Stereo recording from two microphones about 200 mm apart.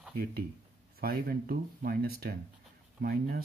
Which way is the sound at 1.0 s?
45° right (ahead or behind).